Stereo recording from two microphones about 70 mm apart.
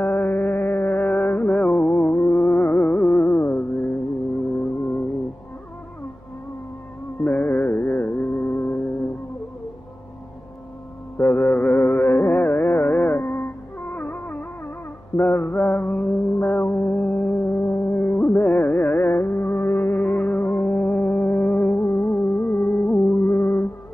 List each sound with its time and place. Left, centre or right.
0.0 s music: left
7.2 s music: left
11.1 s music: left